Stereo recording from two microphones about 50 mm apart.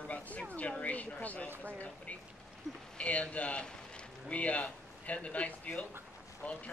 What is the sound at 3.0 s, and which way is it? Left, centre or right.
A man's voice, left.